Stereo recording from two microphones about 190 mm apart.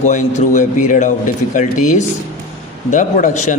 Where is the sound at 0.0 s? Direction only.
40° left (ahead or behind).